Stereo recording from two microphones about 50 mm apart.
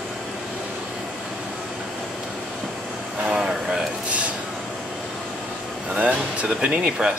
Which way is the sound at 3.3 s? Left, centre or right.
Centre.